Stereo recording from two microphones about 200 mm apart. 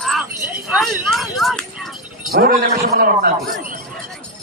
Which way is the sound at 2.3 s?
50° right (ahead or behind).